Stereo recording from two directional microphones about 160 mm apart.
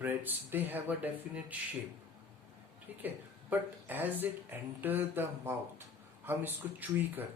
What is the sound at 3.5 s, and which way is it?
Speech, 10° right (ahead or behind).